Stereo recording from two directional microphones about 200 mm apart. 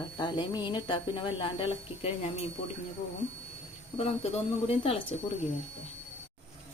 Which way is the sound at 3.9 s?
30° left (ahead or behind).